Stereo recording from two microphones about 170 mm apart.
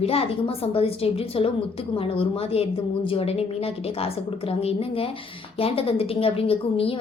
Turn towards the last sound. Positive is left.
turn(degrees=35)  # may be behind; listen again after turning